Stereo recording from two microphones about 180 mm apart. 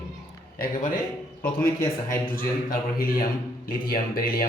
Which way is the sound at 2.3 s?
50° left (ahead or behind).